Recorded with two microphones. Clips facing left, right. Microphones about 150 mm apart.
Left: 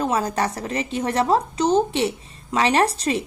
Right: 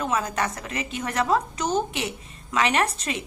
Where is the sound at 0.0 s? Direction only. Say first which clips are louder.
Left 4 dB; 35° left (ahead or behind).